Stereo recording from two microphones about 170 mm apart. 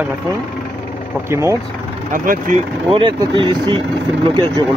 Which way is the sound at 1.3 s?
15° right (ahead or behind).